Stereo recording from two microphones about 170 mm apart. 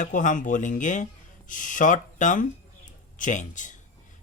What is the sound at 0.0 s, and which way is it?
Speech, 50° left (ahead or behind).